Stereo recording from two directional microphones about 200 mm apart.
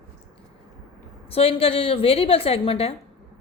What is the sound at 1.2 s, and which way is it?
A woman's voice, 30° left (ahead or behind).